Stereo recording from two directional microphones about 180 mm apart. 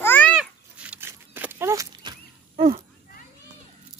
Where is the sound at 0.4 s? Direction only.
5° right (ahead or behind).